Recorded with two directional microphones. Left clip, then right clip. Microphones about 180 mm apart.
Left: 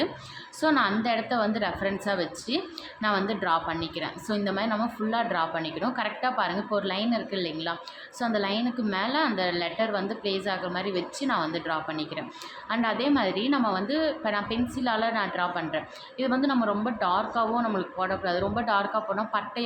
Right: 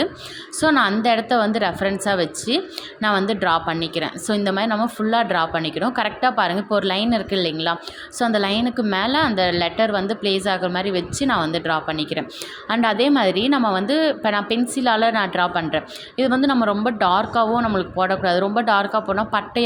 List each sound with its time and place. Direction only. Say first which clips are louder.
0.6 s a woman's voice: right 7 dB; 40° right (ahead or behind)